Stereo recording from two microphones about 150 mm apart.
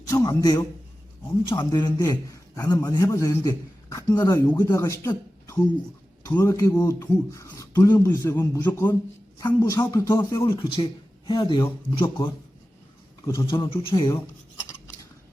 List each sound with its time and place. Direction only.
0.1 s speech: 20° left (ahead or behind)
13.2 s speech: 20° left (ahead or behind)